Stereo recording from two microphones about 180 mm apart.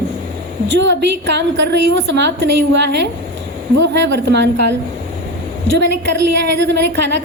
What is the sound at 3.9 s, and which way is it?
Speech, 75° right (ahead or behind).